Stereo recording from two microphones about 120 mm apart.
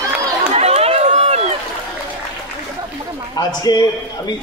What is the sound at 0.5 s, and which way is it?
Run, 60° right (ahead or behind).